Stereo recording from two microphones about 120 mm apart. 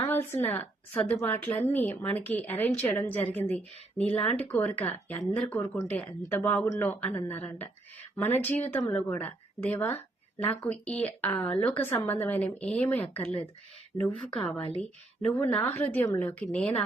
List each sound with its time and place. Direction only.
0.1 s a woman's voice: 20° left (ahead or behind)